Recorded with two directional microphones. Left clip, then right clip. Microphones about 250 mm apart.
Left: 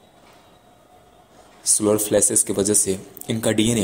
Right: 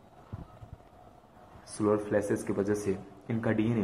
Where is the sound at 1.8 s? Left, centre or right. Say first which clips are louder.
Left 8 dB; left.